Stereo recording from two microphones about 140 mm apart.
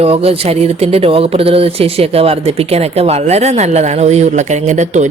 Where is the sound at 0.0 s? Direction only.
45° right (ahead or behind).